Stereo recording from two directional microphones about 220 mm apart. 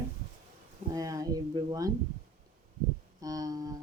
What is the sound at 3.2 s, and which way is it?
Speech, 15° right (ahead or behind).